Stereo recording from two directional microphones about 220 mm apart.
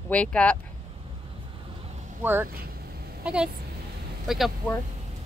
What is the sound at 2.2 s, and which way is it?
A woman's voice, 10° right (ahead or behind).